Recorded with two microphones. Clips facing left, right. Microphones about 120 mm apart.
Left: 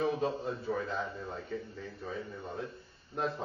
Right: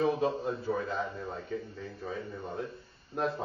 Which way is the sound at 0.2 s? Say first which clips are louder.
Right 3 dB; centre (ahead or behind).